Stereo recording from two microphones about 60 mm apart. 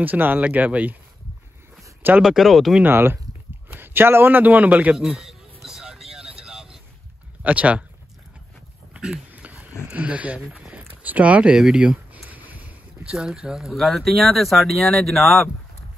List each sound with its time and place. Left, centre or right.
0.0 s speech: right
2.2 s speech: centre
2.8 s a man's voice: right
5.2 s a sound: centre
7.4 s speech: right
8.9 s dog: centre
9.3 s dog: right
9.8 s speech: right
11.5 s speech: centre
12.1 s a sound: right
13.1 s speech: centre